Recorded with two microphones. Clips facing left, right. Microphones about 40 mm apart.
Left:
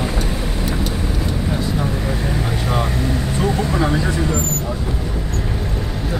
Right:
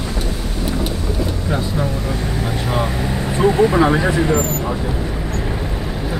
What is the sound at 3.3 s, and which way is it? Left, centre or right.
Vehicle, centre.